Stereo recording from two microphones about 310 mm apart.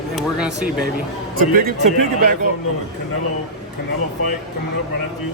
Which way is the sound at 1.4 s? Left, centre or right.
Right.